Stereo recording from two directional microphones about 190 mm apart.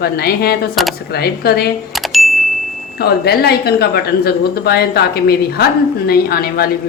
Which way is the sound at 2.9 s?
55° left (ahead or behind).